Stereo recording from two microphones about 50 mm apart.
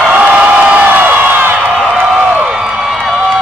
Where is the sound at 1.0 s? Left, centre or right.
Right.